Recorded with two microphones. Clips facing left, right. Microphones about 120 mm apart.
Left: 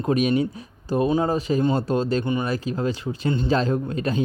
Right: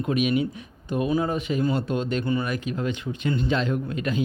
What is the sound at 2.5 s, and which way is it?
Speech, 35° left (ahead or behind).